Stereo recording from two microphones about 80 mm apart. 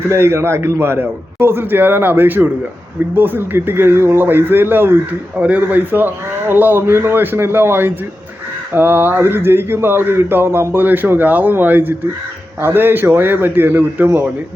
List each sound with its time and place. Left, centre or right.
0.1 s speech: right